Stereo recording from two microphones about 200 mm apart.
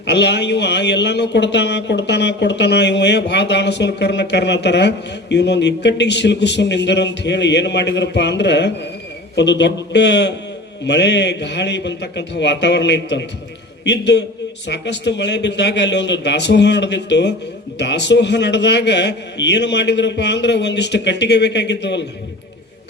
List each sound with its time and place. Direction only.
0.1 s speech: 60° left (ahead or behind)